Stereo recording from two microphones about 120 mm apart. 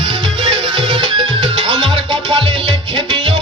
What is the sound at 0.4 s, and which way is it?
Music, 45° right (ahead or behind).